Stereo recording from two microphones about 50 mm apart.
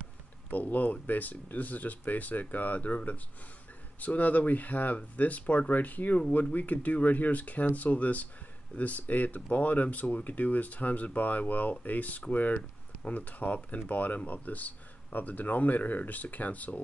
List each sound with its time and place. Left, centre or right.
0.5 s speech: left